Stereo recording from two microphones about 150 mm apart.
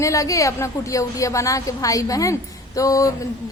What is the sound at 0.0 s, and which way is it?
A woman's voice, 20° left (ahead or behind).